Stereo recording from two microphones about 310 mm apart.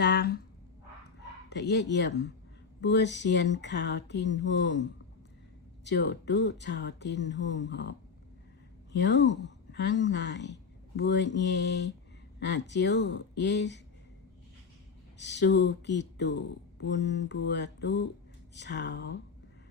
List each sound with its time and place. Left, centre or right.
0.0 s a sound: left
1.5 s speech: left
15.2 s speech: left